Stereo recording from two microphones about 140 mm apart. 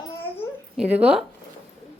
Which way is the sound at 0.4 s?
20° left (ahead or behind).